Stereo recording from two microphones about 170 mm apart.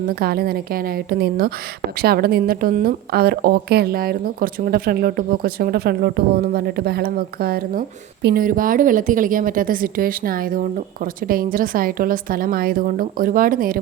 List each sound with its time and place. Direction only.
0.2 s a woman's voice: 65° right (ahead or behind)